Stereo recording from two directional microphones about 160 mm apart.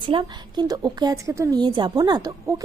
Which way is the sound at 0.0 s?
30° right (ahead or behind).